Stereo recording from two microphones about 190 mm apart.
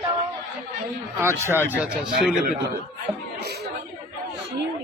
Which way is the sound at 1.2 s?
15° right (ahead or behind).